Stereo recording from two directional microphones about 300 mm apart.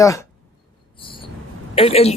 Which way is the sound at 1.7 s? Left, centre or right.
Centre.